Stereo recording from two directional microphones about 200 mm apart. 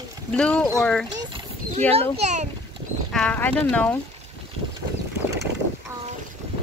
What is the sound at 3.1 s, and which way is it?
Speech, 5° left (ahead or behind).